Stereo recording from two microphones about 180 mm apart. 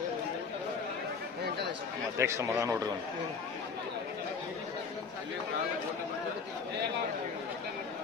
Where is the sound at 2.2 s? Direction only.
15° right (ahead or behind).